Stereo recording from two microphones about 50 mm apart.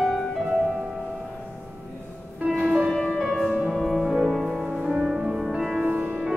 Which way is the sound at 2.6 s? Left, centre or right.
Centre.